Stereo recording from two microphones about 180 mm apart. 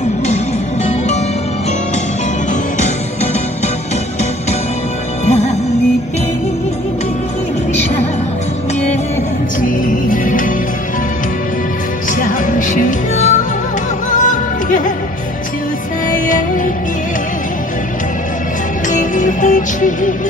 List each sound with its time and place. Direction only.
5.2 s music: 35° left (ahead or behind)
9.6 s music: 50° left (ahead or behind)
12.2 s music: 45° left (ahead or behind)
16.3 s music: 45° left (ahead or behind)
18.9 s music: 45° left (ahead or behind)